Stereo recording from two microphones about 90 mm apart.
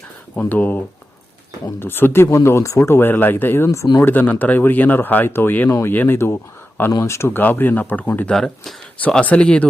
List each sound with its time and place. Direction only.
0.3 s speech: 20° left (ahead or behind)
8.3 s speech: 5° left (ahead or behind)
9.0 s speech: 15° left (ahead or behind)